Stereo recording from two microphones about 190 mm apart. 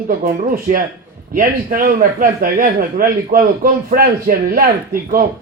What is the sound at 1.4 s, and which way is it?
A man's voice, 45° right (ahead or behind).